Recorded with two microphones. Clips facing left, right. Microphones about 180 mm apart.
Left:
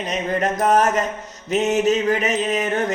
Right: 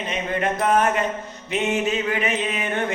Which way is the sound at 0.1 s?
40° left (ahead or behind).